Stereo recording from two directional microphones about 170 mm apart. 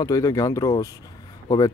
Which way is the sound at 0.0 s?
20° left (ahead or behind).